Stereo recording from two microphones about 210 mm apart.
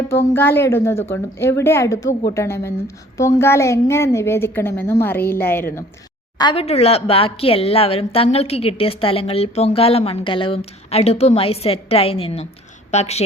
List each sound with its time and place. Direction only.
0.1 s a woman's voice: 10° left (ahead or behind)
6.4 s a woman's voice: 25° left (ahead or behind)